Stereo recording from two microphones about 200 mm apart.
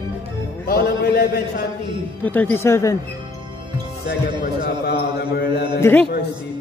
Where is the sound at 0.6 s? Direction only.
50° left (ahead or behind).